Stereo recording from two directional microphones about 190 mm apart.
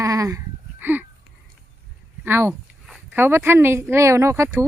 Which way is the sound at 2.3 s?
10° right (ahead or behind).